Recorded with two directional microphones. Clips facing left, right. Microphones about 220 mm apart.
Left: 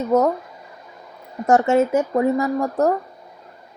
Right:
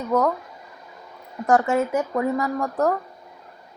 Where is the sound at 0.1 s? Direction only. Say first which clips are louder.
Left 3 dB; 25° left (ahead or behind).